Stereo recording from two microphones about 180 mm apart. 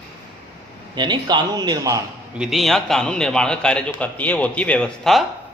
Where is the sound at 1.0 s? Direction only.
25° right (ahead or behind).